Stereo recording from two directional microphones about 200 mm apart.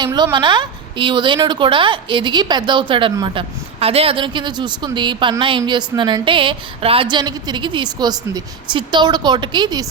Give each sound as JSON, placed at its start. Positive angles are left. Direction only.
{"t": 0.0, "sound": "a woman's voice", "side_deg": -20}